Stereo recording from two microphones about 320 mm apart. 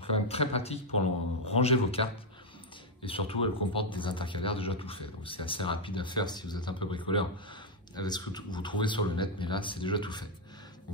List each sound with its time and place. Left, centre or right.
0.1 s speech: centre